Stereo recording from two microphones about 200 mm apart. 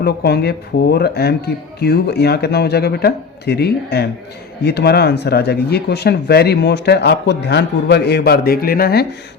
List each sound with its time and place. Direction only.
0.0 s speech: 55° left (ahead or behind)